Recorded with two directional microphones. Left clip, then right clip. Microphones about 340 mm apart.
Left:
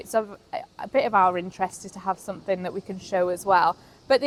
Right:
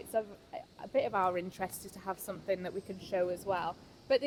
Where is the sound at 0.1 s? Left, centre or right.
Centre.